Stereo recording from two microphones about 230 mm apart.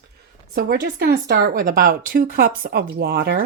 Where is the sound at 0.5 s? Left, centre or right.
Right.